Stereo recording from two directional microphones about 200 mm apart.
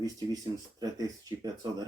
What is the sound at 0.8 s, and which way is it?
Speech, 20° right (ahead or behind).